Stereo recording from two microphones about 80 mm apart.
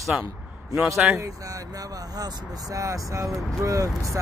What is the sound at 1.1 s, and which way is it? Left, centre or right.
Speech, right.